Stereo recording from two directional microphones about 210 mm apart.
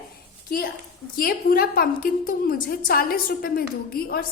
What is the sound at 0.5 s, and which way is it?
A woman's voice, 45° left (ahead or behind).